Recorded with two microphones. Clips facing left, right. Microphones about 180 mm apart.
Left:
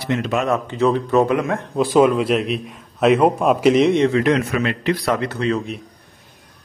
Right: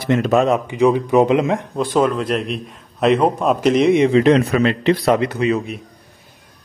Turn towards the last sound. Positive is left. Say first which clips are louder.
# right 2 dB
turn(degrees=-5)  # may be behind; listen again after turning